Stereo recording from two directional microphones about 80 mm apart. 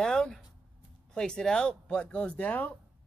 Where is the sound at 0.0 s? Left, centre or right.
Centre.